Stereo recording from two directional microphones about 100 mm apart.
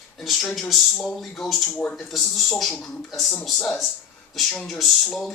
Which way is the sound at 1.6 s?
15° left (ahead or behind).